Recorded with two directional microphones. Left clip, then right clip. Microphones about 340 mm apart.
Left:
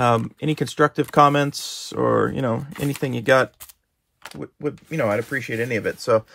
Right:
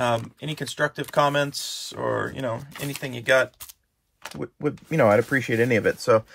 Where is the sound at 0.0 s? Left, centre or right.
Left.